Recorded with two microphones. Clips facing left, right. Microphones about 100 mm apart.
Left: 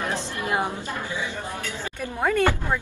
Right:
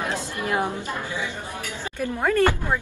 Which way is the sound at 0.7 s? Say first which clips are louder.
Right 1 dB; 20° right (ahead or behind).